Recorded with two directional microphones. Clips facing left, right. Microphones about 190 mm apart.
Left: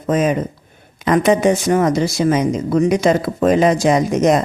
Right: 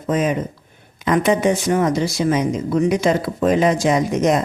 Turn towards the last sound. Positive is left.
turn(degrees=40)  # may be behind; listen again after turning